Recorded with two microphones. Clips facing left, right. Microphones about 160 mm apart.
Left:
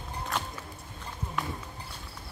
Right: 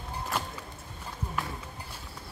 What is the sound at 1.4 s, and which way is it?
Run, centre (ahead or behind).